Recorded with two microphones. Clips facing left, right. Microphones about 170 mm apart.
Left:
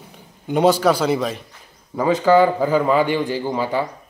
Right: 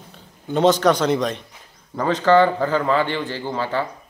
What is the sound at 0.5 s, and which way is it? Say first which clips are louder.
Speech: left 1 dB; 10° left (ahead or behind).